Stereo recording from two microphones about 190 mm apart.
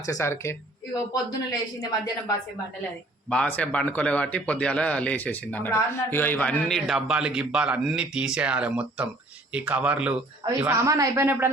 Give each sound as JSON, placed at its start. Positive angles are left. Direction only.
{"t": 0.0, "sound": "a man's voice", "side_deg": 15}
{"t": 3.2, "sound": "a man's voice", "side_deg": 5}